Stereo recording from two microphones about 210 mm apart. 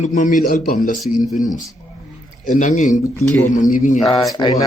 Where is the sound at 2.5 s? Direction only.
35° left (ahead or behind).